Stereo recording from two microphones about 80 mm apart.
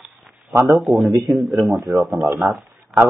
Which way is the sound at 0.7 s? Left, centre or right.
Centre.